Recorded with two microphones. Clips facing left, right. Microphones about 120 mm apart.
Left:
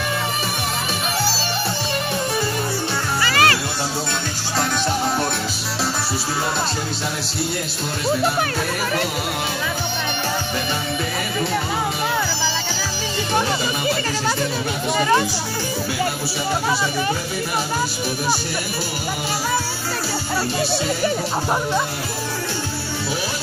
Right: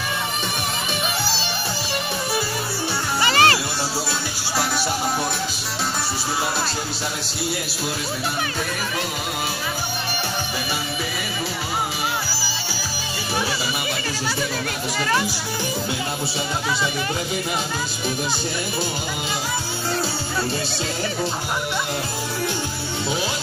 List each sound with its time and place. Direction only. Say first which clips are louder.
3.2 s music: right 1 dB; 25° right (ahead or behind)
15.0 s a child's voice: left 5 dB; 20° left (ahead or behind)